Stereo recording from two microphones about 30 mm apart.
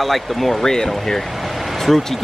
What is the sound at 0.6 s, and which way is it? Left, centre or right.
Speech, centre.